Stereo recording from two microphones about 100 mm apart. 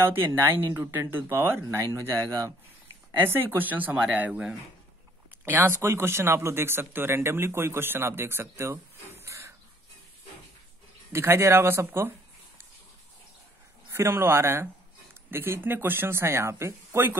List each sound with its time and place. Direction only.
0.0 s speech: 25° right (ahead or behind)
5.4 s speech: 25° right (ahead or behind)
11.1 s speech: 25° right (ahead or behind)
13.9 s speech: 25° right (ahead or behind)